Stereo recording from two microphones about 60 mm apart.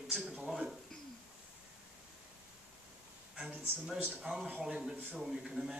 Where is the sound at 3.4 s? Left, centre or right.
Right.